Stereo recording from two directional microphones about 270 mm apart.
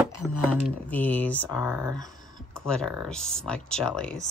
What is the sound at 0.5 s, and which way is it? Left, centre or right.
Speech, centre.